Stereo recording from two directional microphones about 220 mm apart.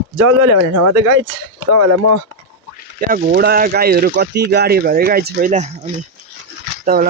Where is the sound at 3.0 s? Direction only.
40° right (ahead or behind).